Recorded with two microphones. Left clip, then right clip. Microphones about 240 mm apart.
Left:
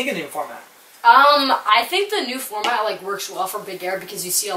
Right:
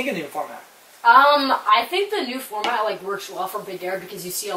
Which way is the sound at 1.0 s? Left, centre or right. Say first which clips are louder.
Left 2 dB; centre.